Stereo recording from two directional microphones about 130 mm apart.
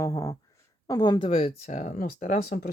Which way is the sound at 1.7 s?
85° left.